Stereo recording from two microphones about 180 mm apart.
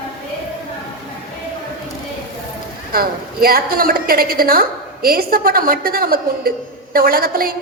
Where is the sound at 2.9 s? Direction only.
55° right (ahead or behind).